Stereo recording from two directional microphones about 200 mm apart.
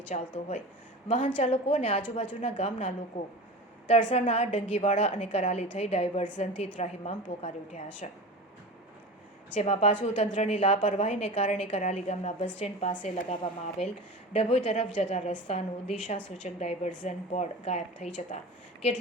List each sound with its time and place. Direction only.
0.1 s a woman's voice: 35° left (ahead or behind)
4.1 s a woman's voice: 35° left (ahead or behind)
9.6 s a woman's voice: 30° left (ahead or behind)
10.6 s a woman's voice: 25° left (ahead or behind)